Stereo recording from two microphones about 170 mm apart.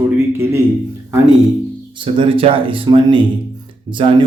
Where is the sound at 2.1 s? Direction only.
30° right (ahead or behind).